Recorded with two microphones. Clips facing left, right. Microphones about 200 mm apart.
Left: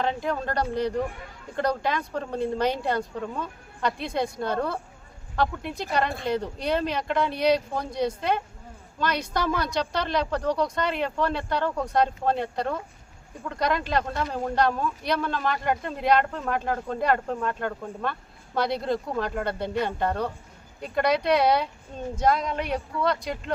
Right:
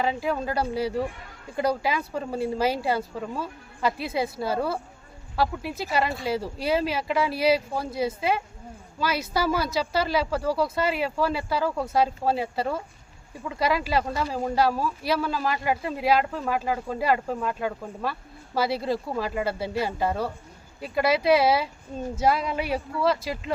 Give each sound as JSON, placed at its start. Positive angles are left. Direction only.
{"t": 0.0, "sound": "speech", "side_deg": -5}